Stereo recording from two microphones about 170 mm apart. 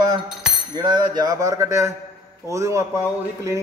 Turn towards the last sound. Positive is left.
turn(degrees=-15)  # may be behind; listen again after turning